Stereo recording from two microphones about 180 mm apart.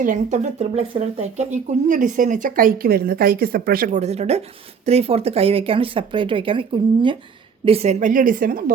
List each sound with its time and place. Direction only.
0.0 s a woman's voice: 45° right (ahead or behind)